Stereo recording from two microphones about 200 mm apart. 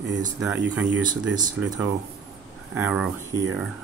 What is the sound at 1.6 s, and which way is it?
Speech, 20° right (ahead or behind).